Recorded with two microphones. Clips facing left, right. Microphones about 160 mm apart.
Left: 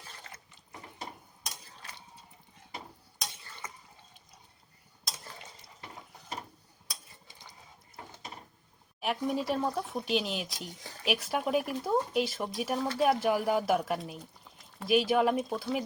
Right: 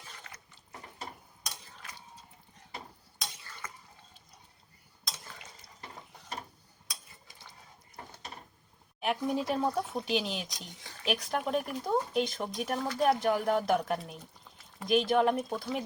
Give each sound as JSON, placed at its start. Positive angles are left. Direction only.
{"t": 3.6, "sound": "a sound", "side_deg": 20}
{"t": 7.3, "sound": "coin", "side_deg": 20}
{"t": 9.0, "sound": "speech", "side_deg": 0}